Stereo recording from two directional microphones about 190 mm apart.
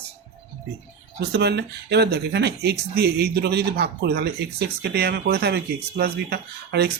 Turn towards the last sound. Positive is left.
turn(degrees=-55)  # may be behind; listen again after turning